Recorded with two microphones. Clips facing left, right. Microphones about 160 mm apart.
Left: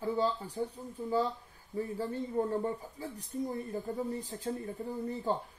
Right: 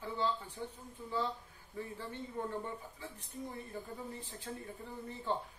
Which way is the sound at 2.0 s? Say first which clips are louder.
Left 9 dB; 35° left (ahead or behind).